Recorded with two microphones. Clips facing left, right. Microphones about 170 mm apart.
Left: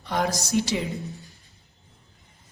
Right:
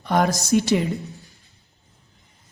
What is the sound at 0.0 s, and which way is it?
Speech, 50° right (ahead or behind).